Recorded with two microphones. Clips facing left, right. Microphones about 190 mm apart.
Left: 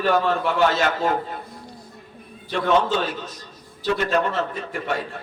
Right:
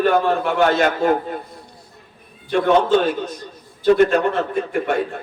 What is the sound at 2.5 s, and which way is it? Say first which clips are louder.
A man's voice: right 5 dB; 50° right (ahead or behind).